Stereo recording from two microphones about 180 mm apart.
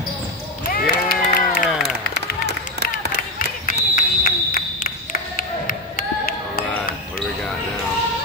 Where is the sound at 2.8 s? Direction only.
65° right (ahead or behind).